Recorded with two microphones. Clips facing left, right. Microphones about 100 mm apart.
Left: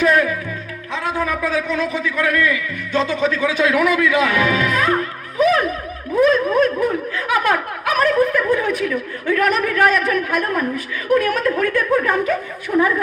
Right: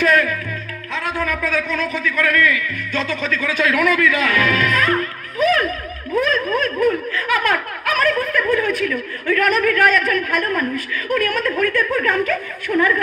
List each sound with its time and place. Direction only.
0.0 s music: 15° left (ahead or behind)
1.0 s a man's voice: 15° left (ahead or behind)